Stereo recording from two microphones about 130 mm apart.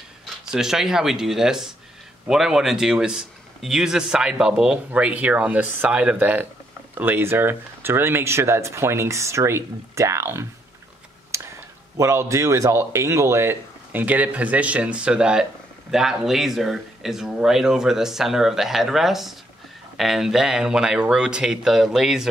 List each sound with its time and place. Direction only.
0.5 s a man's voice: 5° right (ahead or behind); by 10.4 s 20° right (ahead or behind)
11.3 s a sound: 20° right (ahead or behind)
12.0 s a man's voice: 20° right (ahead or behind); by 22.3 s 5° right (ahead or behind)